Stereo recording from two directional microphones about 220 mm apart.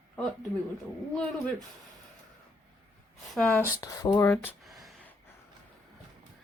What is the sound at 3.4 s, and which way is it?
Speech, 5° left (ahead or behind).